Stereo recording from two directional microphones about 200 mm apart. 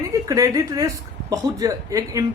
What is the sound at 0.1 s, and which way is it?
Speech, 15° right (ahead or behind).